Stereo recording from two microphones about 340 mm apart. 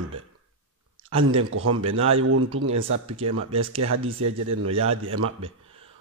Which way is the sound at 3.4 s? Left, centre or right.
Centre.